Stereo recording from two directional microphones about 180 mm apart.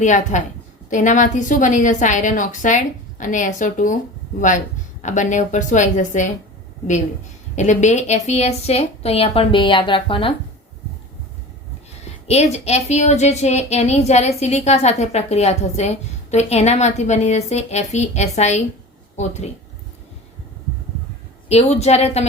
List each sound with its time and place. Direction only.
0.0 s a woman's voice: 45° left (ahead or behind)
7.5 s a woman's voice: 40° left (ahead or behind)
12.3 s a woman's voice: 35° left (ahead or behind)
21.5 s a woman's voice: 35° left (ahead or behind)